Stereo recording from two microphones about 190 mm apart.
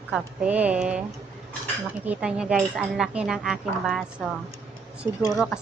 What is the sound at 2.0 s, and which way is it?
Speech, 5° right (ahead or behind).